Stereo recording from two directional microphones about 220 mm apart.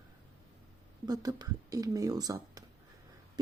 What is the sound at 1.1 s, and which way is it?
Speech, 15° right (ahead or behind).